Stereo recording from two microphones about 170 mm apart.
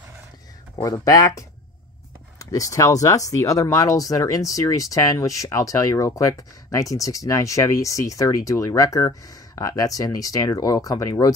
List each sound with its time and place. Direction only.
0.8 s speech: 20° left (ahead or behind)